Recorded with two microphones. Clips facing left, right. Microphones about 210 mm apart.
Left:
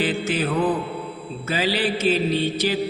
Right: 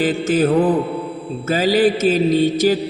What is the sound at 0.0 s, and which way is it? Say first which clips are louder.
Mantra: right 7 dB; 45° right (ahead or behind).